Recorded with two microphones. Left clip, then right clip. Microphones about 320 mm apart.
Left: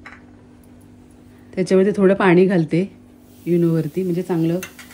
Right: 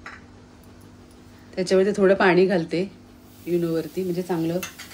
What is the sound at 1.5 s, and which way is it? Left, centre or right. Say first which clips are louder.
Speech: left 3 dB; centre.